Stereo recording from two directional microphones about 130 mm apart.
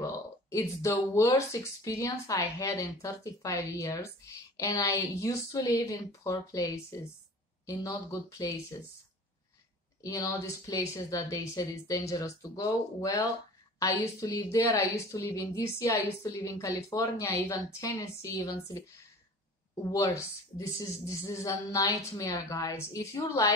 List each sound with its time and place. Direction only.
0.0 s speech: 25° left (ahead or behind)
10.0 s speech: 25° left (ahead or behind)